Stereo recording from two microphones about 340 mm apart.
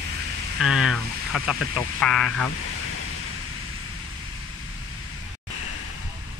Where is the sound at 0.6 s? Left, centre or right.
Centre.